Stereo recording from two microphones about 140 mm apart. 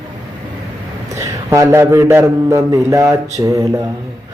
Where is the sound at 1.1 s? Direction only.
20° right (ahead or behind).